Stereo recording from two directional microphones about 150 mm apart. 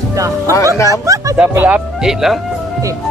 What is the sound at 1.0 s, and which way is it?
Music, 20° right (ahead or behind).